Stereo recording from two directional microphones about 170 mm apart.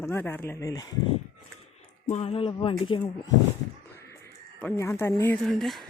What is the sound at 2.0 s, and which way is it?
Speech, 40° left (ahead or behind).